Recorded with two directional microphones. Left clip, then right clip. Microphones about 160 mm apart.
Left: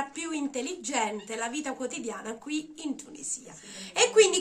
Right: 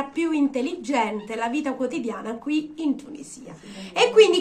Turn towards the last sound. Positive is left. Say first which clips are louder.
# right 6 dB
turn(degrees=20)  # may be behind; listen again after turning